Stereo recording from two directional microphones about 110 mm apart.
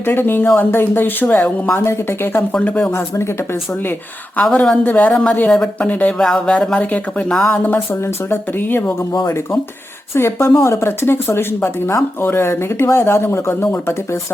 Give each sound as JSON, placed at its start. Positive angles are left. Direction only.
{"t": 0.0, "sound": "speech", "side_deg": 20}
{"t": 4.4, "sound": "speech", "side_deg": 10}
{"t": 10.2, "sound": "speech", "side_deg": 25}